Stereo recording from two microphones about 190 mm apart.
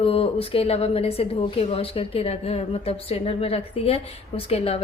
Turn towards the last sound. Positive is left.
turn(degrees=30)  # may be behind; listen again after turning